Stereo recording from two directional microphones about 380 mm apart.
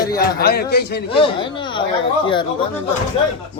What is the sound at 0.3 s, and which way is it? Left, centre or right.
Speech, left.